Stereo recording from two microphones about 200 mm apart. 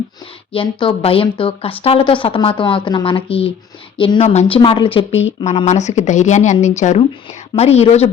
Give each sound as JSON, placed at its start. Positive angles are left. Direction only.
{"t": 0.5, "sound": "a woman's voice", "side_deg": 25}